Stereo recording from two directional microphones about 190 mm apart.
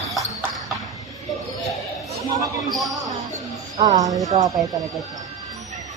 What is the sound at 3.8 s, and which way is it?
Music, 20° right (ahead or behind).